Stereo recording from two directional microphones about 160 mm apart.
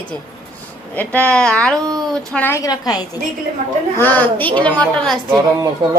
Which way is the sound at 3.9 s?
10° left (ahead or behind).